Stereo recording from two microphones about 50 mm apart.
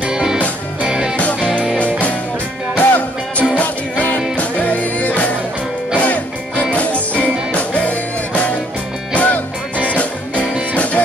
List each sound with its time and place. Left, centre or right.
0.1 s music: centre
1.4 s music: left